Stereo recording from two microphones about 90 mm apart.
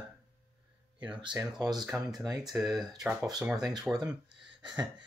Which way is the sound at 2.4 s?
5° right (ahead or behind).